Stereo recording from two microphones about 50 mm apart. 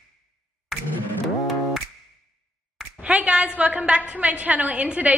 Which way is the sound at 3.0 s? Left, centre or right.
Right.